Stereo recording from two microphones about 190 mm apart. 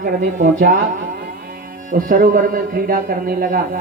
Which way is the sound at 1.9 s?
45° right (ahead or behind).